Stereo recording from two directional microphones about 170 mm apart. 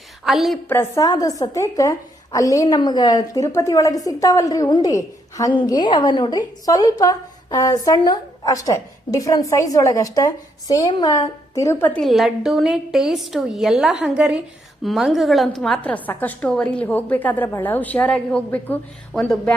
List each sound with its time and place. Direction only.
0.3 s a woman's voice: centre (ahead or behind)
0.7 s a woman's voice: 15° left (ahead or behind)